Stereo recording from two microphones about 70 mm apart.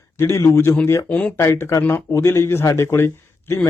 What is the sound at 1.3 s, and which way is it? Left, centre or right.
A man's voice, left.